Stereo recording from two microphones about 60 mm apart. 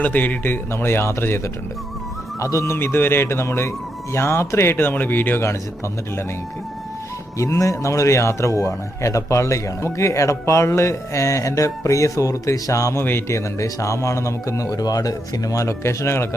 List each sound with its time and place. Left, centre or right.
0.0 s a man's voice: left
2.4 s speech: left
2.7 s speech: left
7.3 s speech: left
13.0 s a man's voice: left
13.2 s speech: left
15.8 s speech: left